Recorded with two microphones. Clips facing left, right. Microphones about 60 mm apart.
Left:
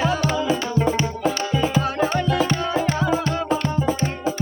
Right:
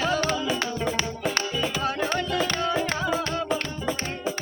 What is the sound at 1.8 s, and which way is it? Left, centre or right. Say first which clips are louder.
Music: left 5 dB; centre.